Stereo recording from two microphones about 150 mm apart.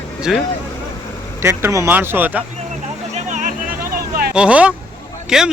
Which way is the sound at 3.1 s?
55° right (ahead or behind).